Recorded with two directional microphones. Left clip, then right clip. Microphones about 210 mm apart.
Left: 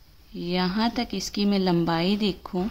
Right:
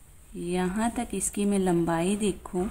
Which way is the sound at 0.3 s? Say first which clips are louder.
Left 3 dB; 15° left (ahead or behind).